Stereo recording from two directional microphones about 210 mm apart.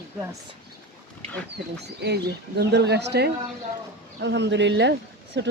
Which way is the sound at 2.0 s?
50° right (ahead or behind).